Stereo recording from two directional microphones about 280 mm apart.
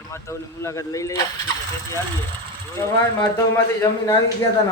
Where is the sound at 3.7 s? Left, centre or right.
Centre.